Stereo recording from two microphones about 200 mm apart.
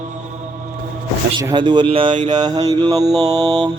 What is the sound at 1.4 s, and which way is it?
A man's voice, 20° right (ahead or behind).